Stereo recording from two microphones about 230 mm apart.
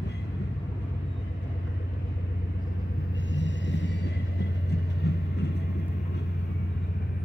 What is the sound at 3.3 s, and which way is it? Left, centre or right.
Rumble, left.